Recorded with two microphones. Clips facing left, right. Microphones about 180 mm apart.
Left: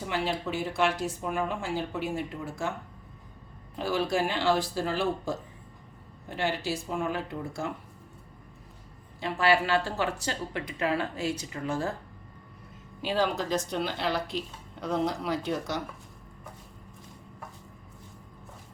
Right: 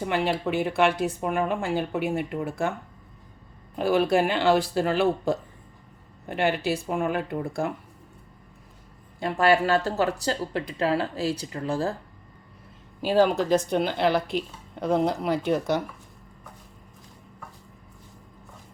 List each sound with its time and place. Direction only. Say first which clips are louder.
0.0 s speech: right 5 dB; 60° right (ahead or behind)
3.8 s speech: right 6 dB; 60° right (ahead or behind)
9.2 s speech: right 4 dB; 45° right (ahead or behind)
13.0 s speech: right 7 dB; 45° right (ahead or behind)